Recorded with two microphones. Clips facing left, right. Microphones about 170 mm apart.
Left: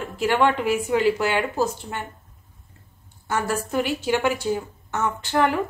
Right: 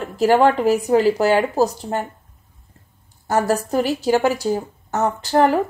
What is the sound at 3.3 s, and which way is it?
A woman's voice, 40° right (ahead or behind).